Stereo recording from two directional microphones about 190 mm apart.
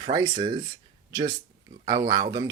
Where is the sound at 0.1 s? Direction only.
20° right (ahead or behind).